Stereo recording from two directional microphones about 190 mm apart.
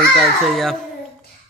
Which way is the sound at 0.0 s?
Centre (ahead or behind).